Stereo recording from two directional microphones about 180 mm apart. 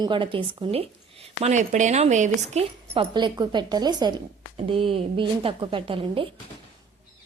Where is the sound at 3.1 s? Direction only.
25° right (ahead or behind).